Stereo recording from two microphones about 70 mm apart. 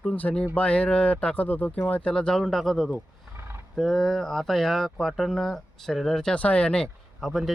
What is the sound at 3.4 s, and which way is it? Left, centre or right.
Roaring cats, right.